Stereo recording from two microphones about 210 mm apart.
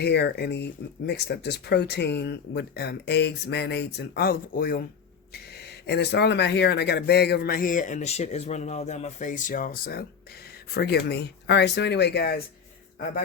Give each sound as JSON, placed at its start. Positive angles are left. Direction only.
{"t": 0.0, "sound": "speech", "side_deg": 55}